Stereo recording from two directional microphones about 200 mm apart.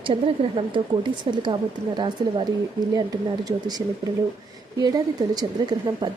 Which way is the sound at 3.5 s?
20° right (ahead or behind).